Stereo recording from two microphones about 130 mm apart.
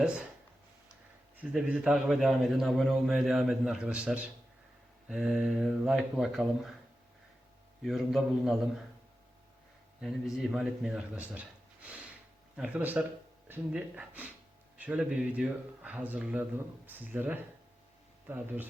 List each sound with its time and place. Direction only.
1.4 s a man's voice: 10° right (ahead or behind)
7.8 s a man's voice: centre (ahead or behind)
10.0 s a man's voice: centre (ahead or behind)